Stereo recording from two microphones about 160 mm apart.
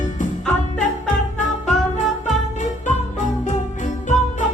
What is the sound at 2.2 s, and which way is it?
Music, 50° left (ahead or behind).